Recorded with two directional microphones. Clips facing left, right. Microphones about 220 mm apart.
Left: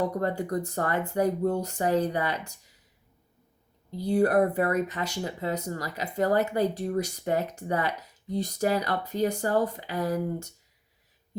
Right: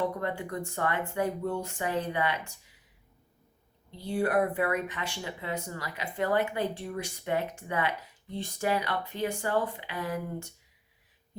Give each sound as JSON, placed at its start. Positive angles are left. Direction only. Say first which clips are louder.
{"t": 0.1, "sound": "speech", "louder": "left 5 dB", "side_deg": 40}
{"t": 3.9, "sound": "speech", "louder": "left 5 dB", "side_deg": 40}